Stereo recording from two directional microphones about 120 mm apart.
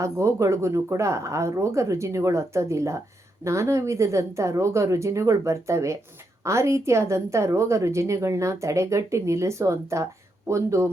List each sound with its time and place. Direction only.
0.0 s a woman's voice: 25° right (ahead or behind)